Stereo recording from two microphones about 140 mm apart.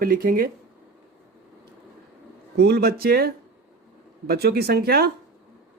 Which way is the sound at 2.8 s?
90° right.